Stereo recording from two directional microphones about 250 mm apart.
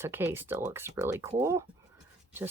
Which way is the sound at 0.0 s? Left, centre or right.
Centre.